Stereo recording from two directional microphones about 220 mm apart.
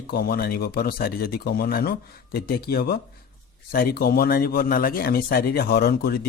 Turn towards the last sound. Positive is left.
turn(degrees=45)  # may be behind; listen again after turning